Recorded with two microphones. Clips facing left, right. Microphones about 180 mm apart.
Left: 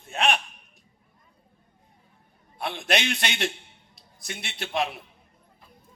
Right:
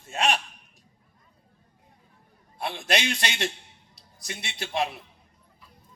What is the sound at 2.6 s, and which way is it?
Speech, 55° left (ahead or behind).